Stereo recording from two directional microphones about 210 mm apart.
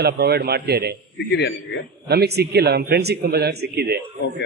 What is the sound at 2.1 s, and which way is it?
Speech, 50° right (ahead or behind).